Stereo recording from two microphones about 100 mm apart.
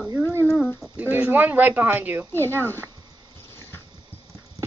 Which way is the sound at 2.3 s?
20° left (ahead or behind).